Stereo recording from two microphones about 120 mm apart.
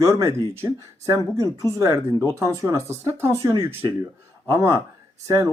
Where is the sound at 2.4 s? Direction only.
25° right (ahead or behind).